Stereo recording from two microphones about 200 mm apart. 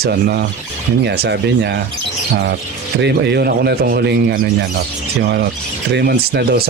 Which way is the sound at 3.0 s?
55° right (ahead or behind).